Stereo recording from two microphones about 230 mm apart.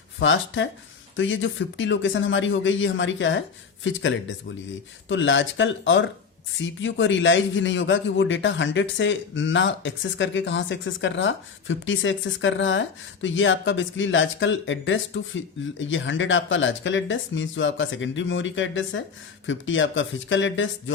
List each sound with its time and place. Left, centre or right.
0.2 s a man's voice: left